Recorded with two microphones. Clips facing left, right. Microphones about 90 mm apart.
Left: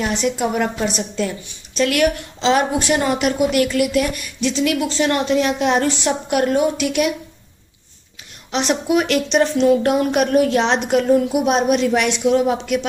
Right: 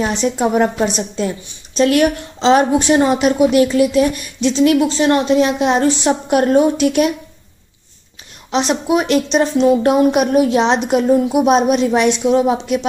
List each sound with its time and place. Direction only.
0.0 s a woman's voice: 30° right (ahead or behind)
8.5 s a woman's voice: 25° right (ahead or behind)